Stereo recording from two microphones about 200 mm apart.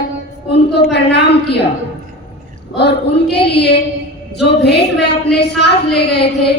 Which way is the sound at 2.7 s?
55° left (ahead or behind).